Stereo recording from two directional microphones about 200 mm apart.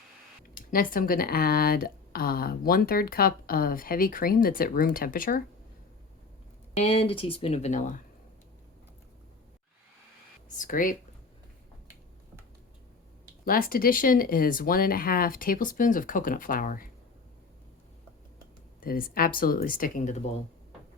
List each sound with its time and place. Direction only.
0.5 s speech: 45° left (ahead or behind)
6.7 s speech: 30° left (ahead or behind)
10.6 s speech: 40° left (ahead or behind)
13.4 s speech: 45° left (ahead or behind)
18.8 s speech: 45° left (ahead or behind)